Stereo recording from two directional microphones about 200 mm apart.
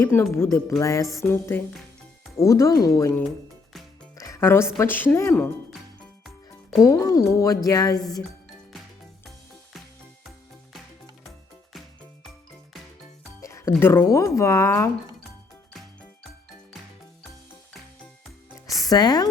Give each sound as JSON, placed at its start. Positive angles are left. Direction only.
{"t": 0.0, "sound": "speech", "side_deg": 10}
{"t": 6.7, "sound": "speech", "side_deg": 15}
{"t": 13.4, "sound": "speech", "side_deg": 15}
{"t": 18.8, "sound": "speech", "side_deg": 20}